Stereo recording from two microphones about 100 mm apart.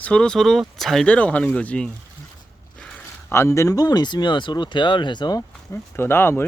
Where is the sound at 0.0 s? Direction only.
10° left (ahead or behind).